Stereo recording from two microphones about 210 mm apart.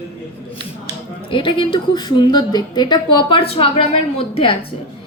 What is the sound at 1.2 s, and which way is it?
Speech, 25° left (ahead or behind).